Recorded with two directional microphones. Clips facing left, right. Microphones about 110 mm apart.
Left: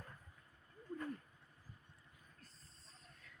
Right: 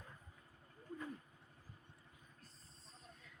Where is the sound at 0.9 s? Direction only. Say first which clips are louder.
Left 3 dB; 10° right (ahead or behind).